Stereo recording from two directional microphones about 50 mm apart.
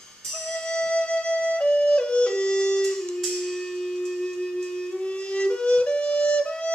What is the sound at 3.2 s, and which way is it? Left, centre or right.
Music, centre.